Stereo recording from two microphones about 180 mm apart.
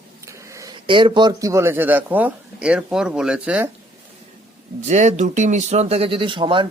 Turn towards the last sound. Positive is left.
turn(degrees=-25)  # may be behind; listen again after turning